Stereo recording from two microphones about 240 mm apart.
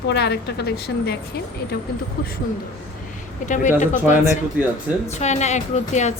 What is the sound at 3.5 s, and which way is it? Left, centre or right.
Speech, left.